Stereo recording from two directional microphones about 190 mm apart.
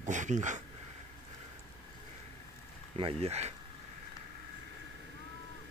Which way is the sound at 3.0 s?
30° right (ahead or behind).